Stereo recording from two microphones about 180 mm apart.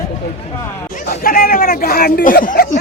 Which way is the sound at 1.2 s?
55° left (ahead or behind).